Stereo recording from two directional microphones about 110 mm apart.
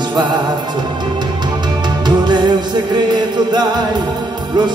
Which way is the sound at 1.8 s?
40° right (ahead or behind).